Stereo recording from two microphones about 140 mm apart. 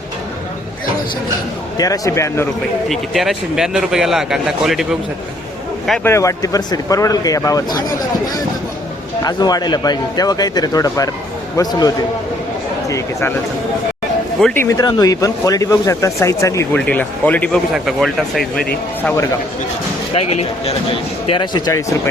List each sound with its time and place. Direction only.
1.8 s speech: 25° left (ahead or behind)
2.9 s a man's voice: centre (ahead or behind)
6.0 s speech: 20° left (ahead or behind)
14.5 s a man's voice: 15° left (ahead or behind)
14.8 s speech: 30° left (ahead or behind)
16.7 s a man's voice: 10° left (ahead or behind)
20.1 s speech: 45° left (ahead or behind)
21.2 s speech: 35° left (ahead or behind)